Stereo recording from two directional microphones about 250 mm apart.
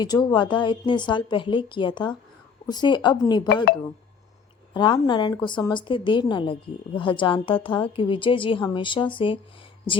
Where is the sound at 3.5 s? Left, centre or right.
Left.